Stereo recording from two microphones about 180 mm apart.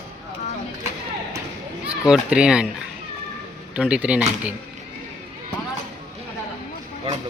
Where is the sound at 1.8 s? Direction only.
5° right (ahead or behind).